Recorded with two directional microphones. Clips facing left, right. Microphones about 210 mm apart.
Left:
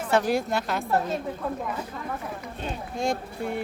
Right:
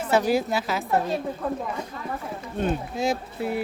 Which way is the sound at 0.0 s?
5° right (ahead or behind).